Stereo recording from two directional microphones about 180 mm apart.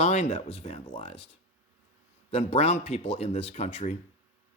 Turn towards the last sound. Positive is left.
turn(degrees=35)  # may be behind; listen again after turning